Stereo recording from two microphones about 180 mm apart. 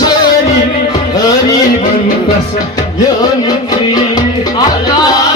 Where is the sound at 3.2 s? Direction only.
20° left (ahead or behind).